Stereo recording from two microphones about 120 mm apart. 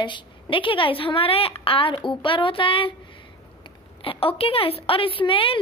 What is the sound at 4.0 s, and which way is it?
Speech, 50° left (ahead or behind).